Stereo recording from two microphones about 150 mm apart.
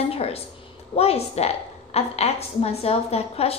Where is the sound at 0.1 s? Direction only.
40° left (ahead or behind).